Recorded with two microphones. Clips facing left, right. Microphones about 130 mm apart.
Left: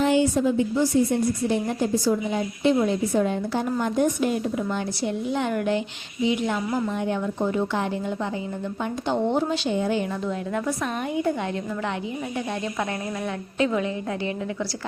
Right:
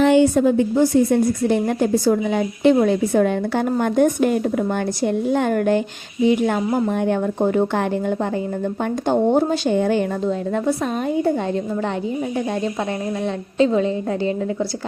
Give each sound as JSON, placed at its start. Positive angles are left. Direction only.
{"t": 0.0, "sound": "a woman's voice", "side_deg": -60}
{"t": 10.2, "sound": "a woman's voice", "side_deg": -30}
{"t": 13.2, "sound": "a woman's voice", "side_deg": -30}